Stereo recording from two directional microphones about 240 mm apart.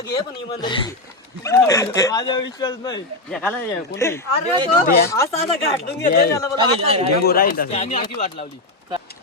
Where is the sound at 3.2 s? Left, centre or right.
Centre.